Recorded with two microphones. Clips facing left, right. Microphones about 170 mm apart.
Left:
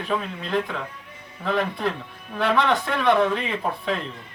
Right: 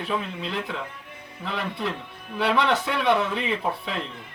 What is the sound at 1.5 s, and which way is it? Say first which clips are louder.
Speech: left 5 dB; 45° left (ahead or behind).